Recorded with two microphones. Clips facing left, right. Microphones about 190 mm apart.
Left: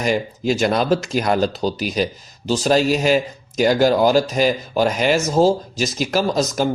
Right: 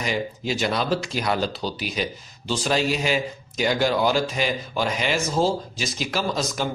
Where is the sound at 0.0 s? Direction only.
45° left (ahead or behind).